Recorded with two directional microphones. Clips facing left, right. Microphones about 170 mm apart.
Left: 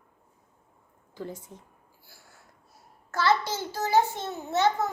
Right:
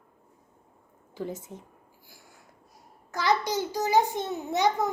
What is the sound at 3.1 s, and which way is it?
A child's voice, 15° right (ahead or behind).